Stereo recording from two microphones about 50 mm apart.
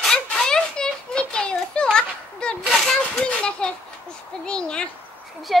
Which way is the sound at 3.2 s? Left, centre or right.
Centre.